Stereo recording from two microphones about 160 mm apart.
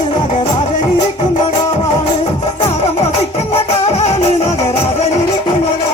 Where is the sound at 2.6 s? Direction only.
40° left (ahead or behind).